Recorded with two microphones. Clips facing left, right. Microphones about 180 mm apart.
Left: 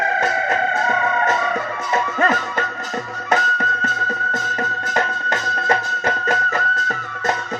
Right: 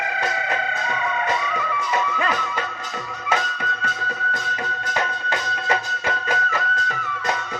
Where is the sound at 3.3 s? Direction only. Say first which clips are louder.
Left 4 dB; 45° left (ahead or behind).